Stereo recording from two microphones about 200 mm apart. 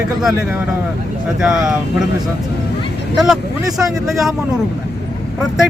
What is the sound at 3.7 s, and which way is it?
Speech, 15° right (ahead or behind).